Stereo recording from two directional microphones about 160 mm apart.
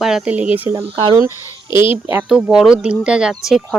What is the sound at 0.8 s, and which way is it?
Speech, 35° right (ahead or behind).